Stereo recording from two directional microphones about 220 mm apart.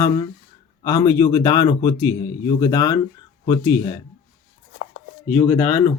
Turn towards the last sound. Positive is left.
turn(degrees=15)  # may be behind; listen again after turning